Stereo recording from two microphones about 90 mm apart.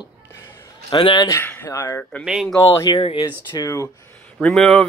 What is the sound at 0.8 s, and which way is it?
Speech, 55° left (ahead or behind).